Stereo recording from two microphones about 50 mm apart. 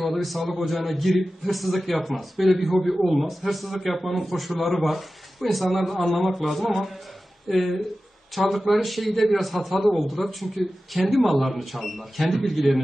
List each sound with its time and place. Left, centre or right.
0.0 s a man's voice: centre